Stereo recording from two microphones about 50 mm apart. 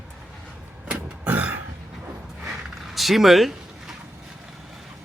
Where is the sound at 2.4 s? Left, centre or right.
Centre.